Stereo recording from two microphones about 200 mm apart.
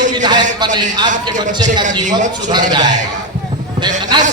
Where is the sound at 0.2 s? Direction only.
20° right (ahead or behind).